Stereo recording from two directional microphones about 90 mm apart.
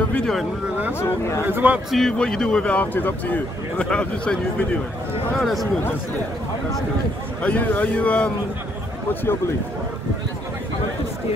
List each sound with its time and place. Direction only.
0.9 s speech: 30° left (ahead or behind)
1.4 s speech: 20° right (ahead or behind)
1.9 s speech: 5° left (ahead or behind)
5.4 s a man's voice: centre (ahead or behind)
7.4 s speech: 15° left (ahead or behind)